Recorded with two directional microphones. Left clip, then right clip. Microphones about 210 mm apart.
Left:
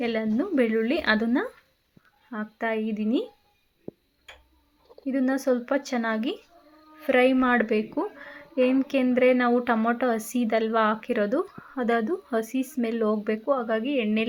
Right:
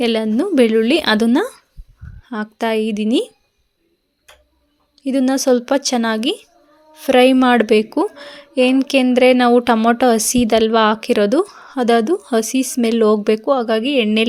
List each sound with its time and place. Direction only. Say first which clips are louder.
0.0 s a woman's voice: right 10 dB; 50° right (ahead or behind)
5.0 s speech: right 9 dB; 40° right (ahead or behind)
5.4 s a woman's voice: right 10 dB; 55° right (ahead or behind)
7.9 s a woman's voice: right 11 dB; 40° right (ahead or behind)
11.3 s speech: right 10 dB; 40° right (ahead or behind)
12.8 s a woman's voice: right 12 dB; 50° right (ahead or behind)